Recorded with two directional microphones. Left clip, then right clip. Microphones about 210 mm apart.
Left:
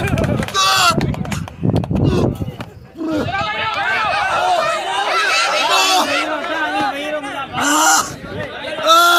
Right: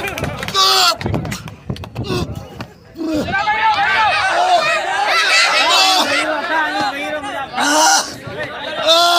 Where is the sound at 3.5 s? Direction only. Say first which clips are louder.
Right 8 dB; 45° left (ahead or behind).